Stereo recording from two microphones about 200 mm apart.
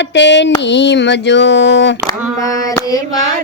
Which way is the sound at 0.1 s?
60° left (ahead or behind).